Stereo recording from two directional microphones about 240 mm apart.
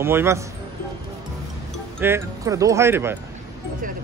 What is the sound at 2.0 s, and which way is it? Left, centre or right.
Speech, centre.